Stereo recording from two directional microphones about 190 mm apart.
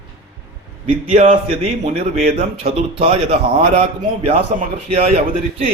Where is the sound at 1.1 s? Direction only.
35° right (ahead or behind).